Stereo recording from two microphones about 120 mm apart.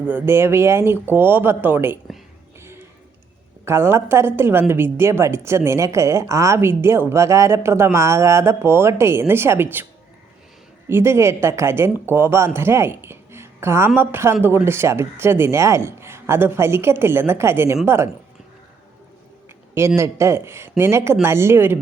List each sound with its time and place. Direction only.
0.1 s a woman's voice: 20° right (ahead or behind)
2.6 s a sound: 20° right (ahead or behind)
3.7 s a woman's voice: 20° right (ahead or behind)
10.8 s a woman's voice: 20° right (ahead or behind)
20.0 s a woman's voice: 25° right (ahead or behind)